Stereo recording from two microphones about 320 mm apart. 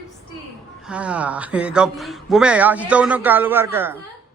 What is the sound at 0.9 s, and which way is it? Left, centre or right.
A man's voice, centre.